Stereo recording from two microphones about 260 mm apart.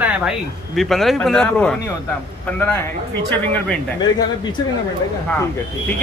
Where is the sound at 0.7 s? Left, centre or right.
Centre.